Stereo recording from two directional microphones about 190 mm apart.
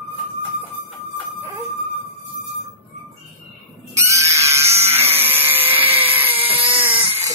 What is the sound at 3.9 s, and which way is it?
Pig, 15° right (ahead or behind).